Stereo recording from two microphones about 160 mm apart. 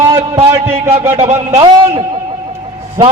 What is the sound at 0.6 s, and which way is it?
A man's voice, 40° right (ahead or behind).